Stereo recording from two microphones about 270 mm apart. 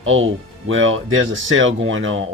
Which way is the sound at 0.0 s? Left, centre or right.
Right.